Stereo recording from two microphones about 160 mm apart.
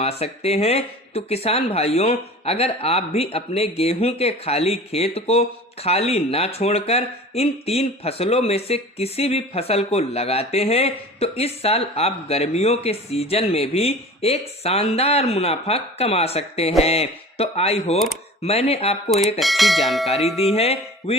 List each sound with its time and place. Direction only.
0.0 s speech: 40° left (ahead or behind)
19.1 s speech: centre (ahead or behind)
20.4 s music: 40° left (ahead or behind)